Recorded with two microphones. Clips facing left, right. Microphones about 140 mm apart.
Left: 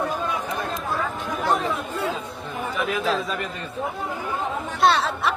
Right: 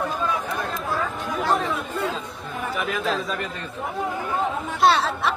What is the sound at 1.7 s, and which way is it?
Chatter, 10° left (ahead or behind).